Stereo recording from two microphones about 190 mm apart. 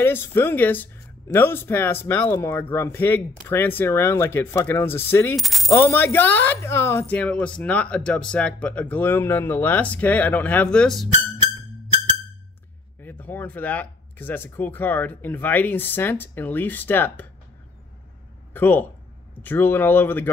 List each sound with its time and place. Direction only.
0.0 s speech: 10° left (ahead or behind)
5.3 s coin: centre (ahead or behind)
5.8 s speech: 15° left (ahead or behind)
13.0 s speech: 10° left (ahead or behind)
18.5 s speech: 10° left (ahead or behind)